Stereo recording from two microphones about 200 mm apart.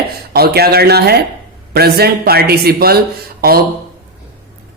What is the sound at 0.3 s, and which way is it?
Speech, 50° right (ahead or behind).